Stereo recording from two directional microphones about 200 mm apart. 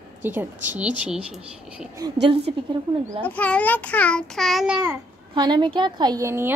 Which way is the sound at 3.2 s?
5° left (ahead or behind).